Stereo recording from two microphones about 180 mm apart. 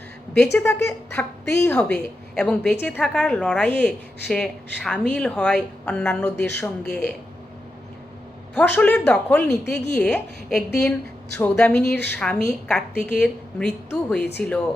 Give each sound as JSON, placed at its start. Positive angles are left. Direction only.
{"t": 0.5, "sound": "a woman's voice", "side_deg": 15}
{"t": 8.5, "sound": "a woman's voice", "side_deg": 10}